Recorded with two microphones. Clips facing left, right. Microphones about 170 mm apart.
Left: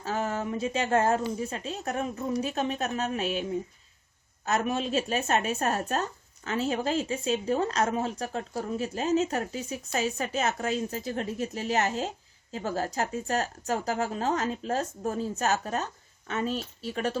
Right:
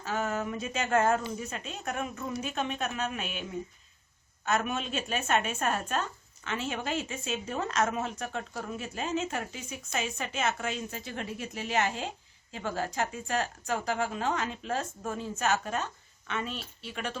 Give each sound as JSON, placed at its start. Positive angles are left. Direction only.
{"t": 0.0, "sound": "speech", "side_deg": 30}
{"t": 4.4, "sound": "speech", "side_deg": 35}